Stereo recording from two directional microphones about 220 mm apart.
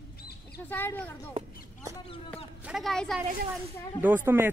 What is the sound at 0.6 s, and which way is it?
Speech, 10° left (ahead or behind).